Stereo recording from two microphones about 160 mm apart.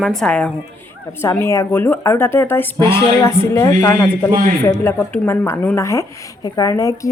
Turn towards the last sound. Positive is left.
turn(degrees=20)  # may be behind; listen again after turning